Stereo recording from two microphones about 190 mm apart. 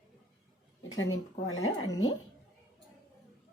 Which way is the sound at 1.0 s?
90° left.